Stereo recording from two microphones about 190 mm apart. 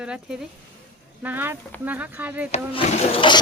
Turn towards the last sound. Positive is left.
turn(degrees=30)  # may be behind; listen again after turning